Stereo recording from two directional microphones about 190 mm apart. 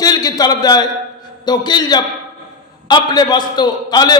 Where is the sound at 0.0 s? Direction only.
20° left (ahead or behind).